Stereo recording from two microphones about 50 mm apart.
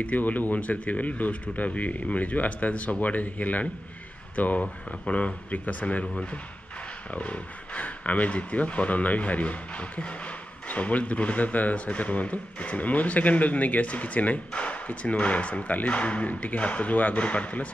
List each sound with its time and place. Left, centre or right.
0.0 s speech: left